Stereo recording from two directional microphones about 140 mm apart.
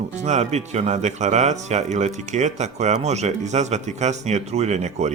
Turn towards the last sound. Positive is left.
turn(degrees=-55)  # may be behind; listen again after turning